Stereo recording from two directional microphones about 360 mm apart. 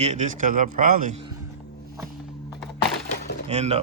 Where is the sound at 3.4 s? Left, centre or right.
Centre.